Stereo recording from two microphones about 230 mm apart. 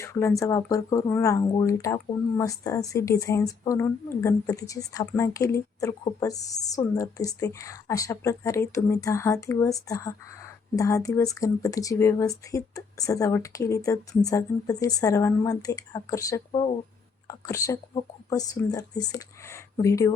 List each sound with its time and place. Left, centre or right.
0.0 s speech: centre